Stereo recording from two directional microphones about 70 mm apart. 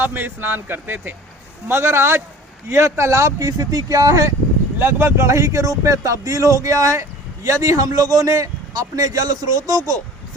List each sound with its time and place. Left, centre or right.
0.0 s a man's voice: right
4.8 s a man's voice: right